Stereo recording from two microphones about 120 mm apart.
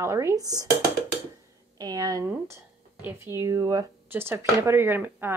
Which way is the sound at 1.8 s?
30° right (ahead or behind).